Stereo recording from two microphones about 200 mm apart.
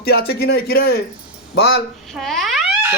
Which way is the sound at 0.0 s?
55° left (ahead or behind).